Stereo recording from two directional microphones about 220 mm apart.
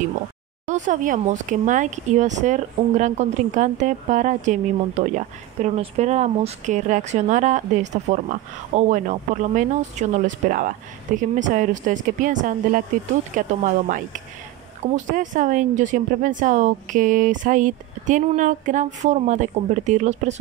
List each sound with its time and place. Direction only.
0.7 s speech: 35° right (ahead or behind)